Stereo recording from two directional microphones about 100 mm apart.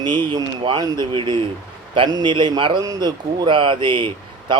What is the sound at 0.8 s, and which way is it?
A man's voice, 45° right (ahead or behind).